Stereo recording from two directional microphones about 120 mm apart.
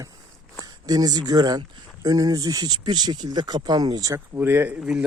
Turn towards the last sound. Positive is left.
turn(degrees=-5)  # may be behind; listen again after turning